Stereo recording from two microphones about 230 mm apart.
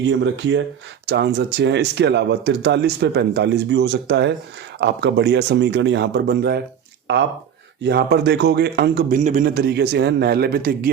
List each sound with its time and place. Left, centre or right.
0.0 s speech: right
7.8 s speech: right
9.1 s speech: right